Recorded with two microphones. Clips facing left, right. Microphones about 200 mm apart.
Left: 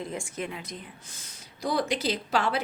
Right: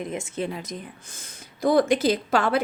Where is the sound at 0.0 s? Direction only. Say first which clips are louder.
Right 5 dB; 20° right (ahead or behind).